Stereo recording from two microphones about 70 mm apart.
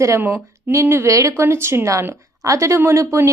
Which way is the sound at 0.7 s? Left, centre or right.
Right.